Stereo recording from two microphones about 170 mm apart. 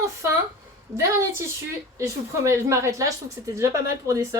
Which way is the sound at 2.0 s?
15° right (ahead or behind).